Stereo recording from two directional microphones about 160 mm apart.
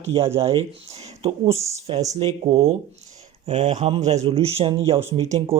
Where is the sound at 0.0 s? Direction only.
35° right (ahead or behind).